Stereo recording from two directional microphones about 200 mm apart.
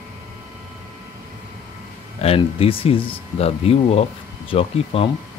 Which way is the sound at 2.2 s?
30° left (ahead or behind).